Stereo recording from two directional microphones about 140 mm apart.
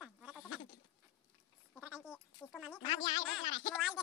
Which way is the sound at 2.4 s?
15° left (ahead or behind).